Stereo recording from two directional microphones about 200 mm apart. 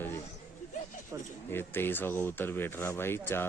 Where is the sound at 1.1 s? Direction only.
15° right (ahead or behind).